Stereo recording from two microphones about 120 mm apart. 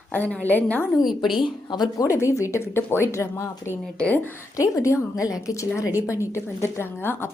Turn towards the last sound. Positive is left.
turn(degrees=20)  # may be behind; listen again after turning